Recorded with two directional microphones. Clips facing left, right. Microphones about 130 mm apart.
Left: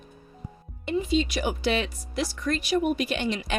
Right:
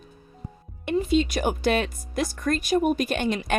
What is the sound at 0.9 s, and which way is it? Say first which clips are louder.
Speech: right 3 dB; 50° right (ahead or behind).